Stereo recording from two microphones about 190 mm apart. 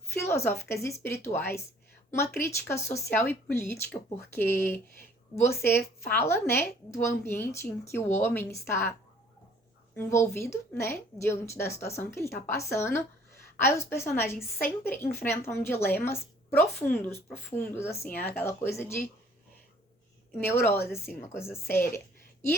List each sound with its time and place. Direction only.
0.1 s a woman's voice: 15° left (ahead or behind)
20.4 s a woman's voice: 10° left (ahead or behind)